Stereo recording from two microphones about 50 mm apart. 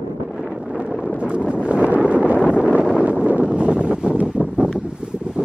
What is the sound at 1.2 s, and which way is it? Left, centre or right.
Wind noise, right.